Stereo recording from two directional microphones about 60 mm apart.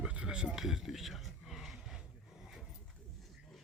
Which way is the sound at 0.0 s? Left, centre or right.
Centre.